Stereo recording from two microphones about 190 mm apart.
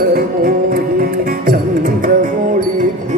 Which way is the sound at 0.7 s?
50° right (ahead or behind).